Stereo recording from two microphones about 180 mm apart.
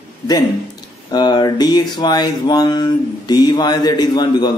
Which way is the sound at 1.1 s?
25° left (ahead or behind).